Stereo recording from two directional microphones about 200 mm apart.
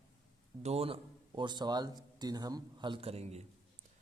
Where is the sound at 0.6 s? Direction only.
30° right (ahead or behind).